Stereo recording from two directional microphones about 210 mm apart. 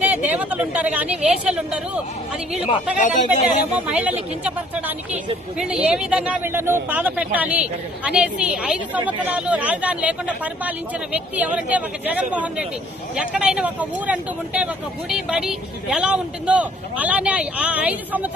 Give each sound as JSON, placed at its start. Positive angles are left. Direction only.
{"t": 0.0, "sound": "speech", "side_deg": -5}
{"t": 3.0, "sound": "speech", "side_deg": 35}
{"t": 3.8, "sound": "speech", "side_deg": -5}